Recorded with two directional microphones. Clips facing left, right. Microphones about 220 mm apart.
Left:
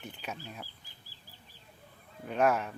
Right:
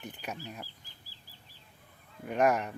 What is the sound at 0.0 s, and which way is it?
Speech, 10° right (ahead or behind).